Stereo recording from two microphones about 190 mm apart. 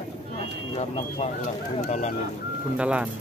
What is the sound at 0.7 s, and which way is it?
Speech, 35° left (ahead or behind).